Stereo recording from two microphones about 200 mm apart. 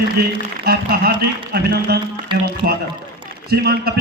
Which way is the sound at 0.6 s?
50° right (ahead or behind).